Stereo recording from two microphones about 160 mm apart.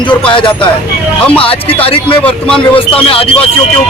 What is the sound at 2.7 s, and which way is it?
Speech, 35° left (ahead or behind).